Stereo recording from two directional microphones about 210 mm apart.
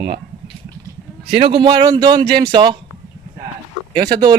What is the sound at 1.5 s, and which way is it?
Speech, 20° right (ahead or behind).